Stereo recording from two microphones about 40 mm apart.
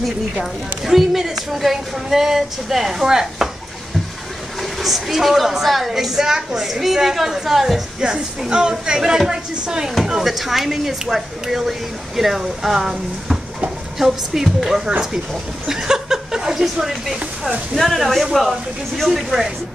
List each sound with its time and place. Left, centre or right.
0.4 s a woman's voice: centre
4.6 s a woman's voice: centre
8.0 s a woman's voice: centre
17.7 s speech: centre